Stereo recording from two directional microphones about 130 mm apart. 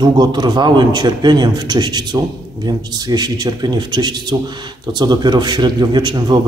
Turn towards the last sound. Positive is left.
turn(degrees=-35)  # may be behind; listen again after turning